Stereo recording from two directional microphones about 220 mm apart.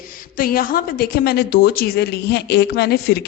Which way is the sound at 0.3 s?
40° left (ahead or behind).